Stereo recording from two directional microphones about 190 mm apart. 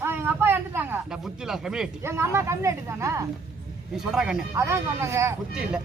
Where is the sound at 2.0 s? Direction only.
15° right (ahead or behind).